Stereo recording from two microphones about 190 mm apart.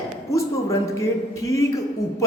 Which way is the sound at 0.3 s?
15° left (ahead or behind).